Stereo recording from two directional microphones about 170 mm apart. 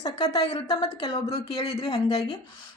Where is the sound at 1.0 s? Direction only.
25° left (ahead or behind).